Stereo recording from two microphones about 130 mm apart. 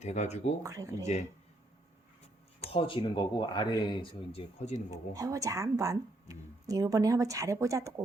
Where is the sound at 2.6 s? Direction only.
45° left (ahead or behind).